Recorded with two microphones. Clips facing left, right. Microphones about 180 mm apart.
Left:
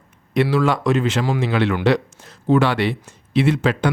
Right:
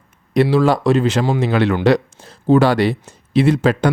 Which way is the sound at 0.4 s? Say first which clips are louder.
Right 4 dB; 35° right (ahead or behind).